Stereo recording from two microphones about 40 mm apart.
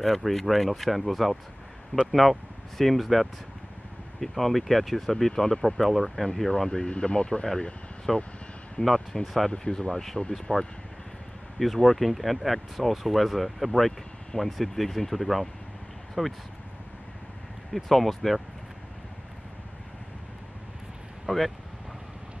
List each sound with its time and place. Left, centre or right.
0.0 s speech: centre
1.9 s speech: left
2.8 s speech: centre
6.9 s speech: left
8.1 s speech: centre
9.7 s speech: centre
11.5 s speech: centre
17.7 s speech: centre
21.3 s speech: right